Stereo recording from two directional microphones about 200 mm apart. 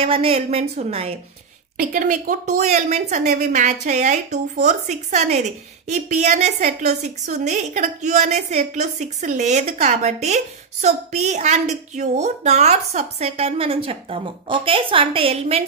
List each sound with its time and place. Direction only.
0.0 s a woman's voice: 30° right (ahead or behind)
1.8 s a woman's voice: 40° right (ahead or behind)